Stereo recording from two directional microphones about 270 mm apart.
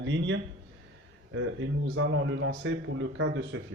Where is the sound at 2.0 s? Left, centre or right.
Right.